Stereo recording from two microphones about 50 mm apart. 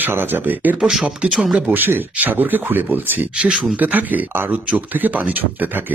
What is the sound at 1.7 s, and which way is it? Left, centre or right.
Speech, right.